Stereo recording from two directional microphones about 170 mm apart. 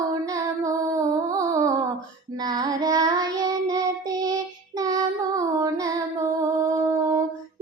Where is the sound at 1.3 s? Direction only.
20° right (ahead or behind).